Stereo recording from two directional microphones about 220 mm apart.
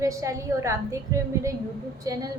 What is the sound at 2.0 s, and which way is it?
Speech, 15° right (ahead or behind).